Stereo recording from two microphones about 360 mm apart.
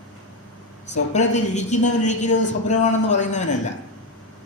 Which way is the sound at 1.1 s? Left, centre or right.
Centre.